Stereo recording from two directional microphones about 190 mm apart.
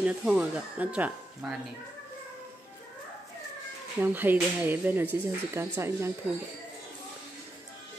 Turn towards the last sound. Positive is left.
turn(degrees=-15)  # may be behind; listen again after turning